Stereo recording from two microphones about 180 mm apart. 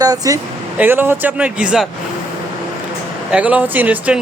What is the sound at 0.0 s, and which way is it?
Speech, 20° right (ahead or behind).